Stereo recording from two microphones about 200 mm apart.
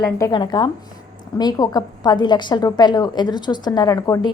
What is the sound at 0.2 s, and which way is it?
A woman's voice, 20° left (ahead or behind).